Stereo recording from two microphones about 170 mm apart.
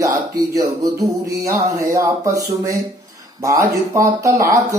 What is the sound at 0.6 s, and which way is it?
Speech, 20° right (ahead or behind).